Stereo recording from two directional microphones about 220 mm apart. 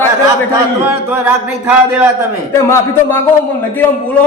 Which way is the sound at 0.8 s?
10° right (ahead or behind).